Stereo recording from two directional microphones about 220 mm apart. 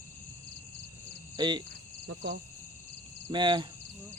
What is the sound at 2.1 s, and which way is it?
Speech, 55° right (ahead or behind).